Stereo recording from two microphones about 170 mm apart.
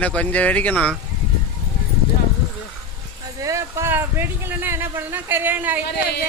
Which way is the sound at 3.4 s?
15° right (ahead or behind).